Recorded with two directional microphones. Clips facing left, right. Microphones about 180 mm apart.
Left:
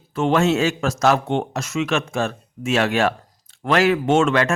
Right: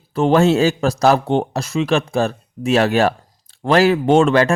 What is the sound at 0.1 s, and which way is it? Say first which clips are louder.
Speech: right 4 dB; 35° right (ahead or behind).